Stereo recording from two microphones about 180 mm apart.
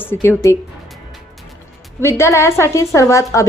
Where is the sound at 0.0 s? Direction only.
15° left (ahead or behind).